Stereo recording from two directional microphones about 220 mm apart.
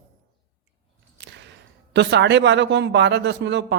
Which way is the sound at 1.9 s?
50° right (ahead or behind).